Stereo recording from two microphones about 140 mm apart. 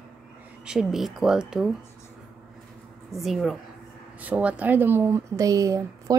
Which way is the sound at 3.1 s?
Centre (ahead or behind).